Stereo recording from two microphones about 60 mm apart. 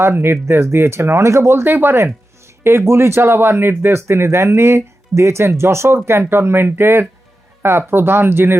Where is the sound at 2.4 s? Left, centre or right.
Right.